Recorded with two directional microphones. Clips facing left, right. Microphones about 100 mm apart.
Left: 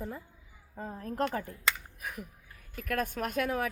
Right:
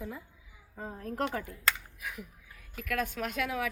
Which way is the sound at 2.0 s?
45° left (ahead or behind).